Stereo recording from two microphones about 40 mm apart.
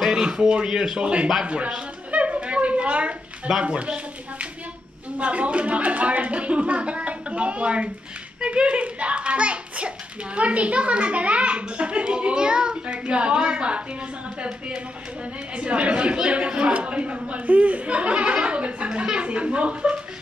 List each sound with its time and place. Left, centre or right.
0.1 s a child's voice: centre
2.0 s a sound: right
5.2 s a child's voice: right
15.5 s a child's voice: right